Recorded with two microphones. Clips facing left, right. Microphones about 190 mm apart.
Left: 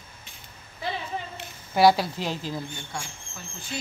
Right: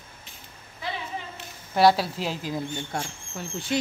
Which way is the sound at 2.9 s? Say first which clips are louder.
Right 5 dB; 55° right (ahead or behind).